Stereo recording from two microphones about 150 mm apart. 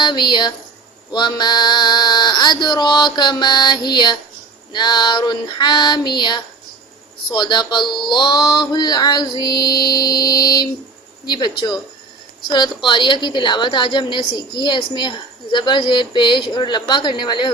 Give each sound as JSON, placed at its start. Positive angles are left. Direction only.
{"t": 0.0, "sound": "mantra", "side_deg": 30}
{"t": 12.5, "sound": "a woman's voice", "side_deg": 30}